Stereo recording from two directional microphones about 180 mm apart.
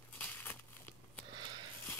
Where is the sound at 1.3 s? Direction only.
25° right (ahead or behind).